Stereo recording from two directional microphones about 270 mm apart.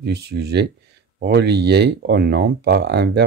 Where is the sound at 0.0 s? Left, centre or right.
Right.